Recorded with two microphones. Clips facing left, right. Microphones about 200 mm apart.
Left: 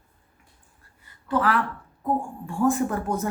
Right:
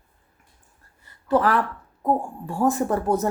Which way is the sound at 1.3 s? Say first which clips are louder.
Right 3 dB; 40° right (ahead or behind).